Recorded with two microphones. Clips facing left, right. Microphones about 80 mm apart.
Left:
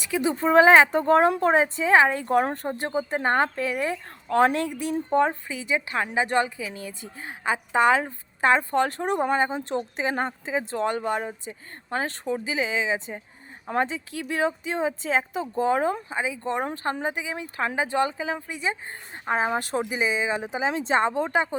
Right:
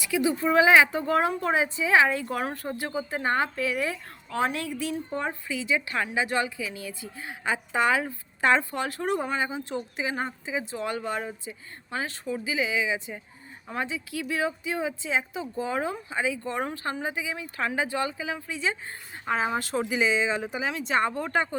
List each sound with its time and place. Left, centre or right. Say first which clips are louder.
0.1 s speech: left 3 dB; left
3.2 s a woman's voice: left 3 dB; left
6.2 s speech: left 3 dB; left
16.1 s speech: left 1 dB; left